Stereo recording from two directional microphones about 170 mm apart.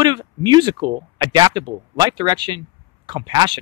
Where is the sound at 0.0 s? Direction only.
25° right (ahead or behind).